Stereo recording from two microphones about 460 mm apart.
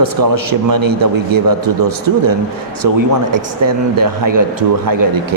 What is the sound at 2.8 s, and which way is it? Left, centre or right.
A man's voice, right.